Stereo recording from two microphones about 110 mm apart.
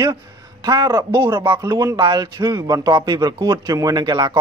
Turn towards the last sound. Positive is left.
turn(degrees=-45)  # may be behind; listen again after turning